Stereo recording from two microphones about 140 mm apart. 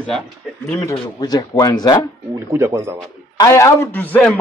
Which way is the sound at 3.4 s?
20° left (ahead or behind).